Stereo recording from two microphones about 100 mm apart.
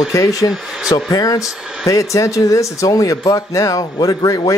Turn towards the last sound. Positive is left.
turn(degrees=35)  # may be behind; listen again after turning